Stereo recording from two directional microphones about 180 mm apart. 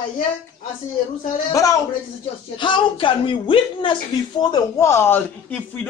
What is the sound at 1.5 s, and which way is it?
A man's voice, 20° left (ahead or behind).